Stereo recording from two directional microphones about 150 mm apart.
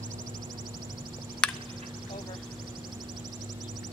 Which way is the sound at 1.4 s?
5° left (ahead or behind).